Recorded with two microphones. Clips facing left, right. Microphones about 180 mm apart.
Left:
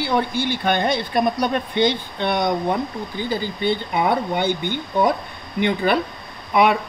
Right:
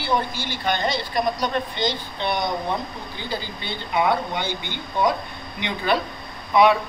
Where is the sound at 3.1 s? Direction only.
50° left (ahead or behind).